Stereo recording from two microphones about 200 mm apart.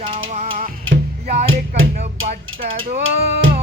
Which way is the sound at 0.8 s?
65° right (ahead or behind).